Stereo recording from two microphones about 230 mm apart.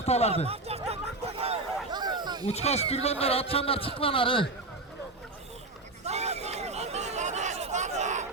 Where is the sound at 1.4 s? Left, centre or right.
Right.